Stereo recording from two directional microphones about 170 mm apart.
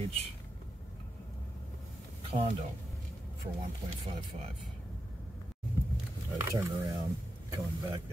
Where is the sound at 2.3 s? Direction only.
35° right (ahead or behind).